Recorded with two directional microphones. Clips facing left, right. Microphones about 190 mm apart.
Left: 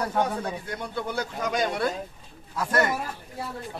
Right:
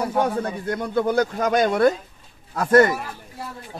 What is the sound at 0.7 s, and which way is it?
Speech, 50° right (ahead or behind).